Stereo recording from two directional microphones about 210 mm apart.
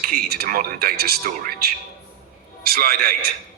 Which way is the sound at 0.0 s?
45° right (ahead or behind).